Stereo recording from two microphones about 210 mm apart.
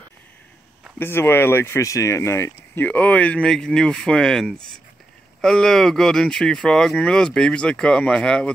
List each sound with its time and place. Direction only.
0.9 s speech: 10° left (ahead or behind)